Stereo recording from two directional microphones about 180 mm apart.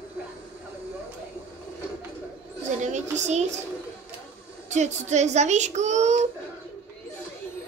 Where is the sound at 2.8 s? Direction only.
40° right (ahead or behind).